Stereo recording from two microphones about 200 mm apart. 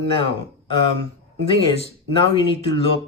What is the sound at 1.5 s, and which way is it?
Speech, 30° left (ahead or behind).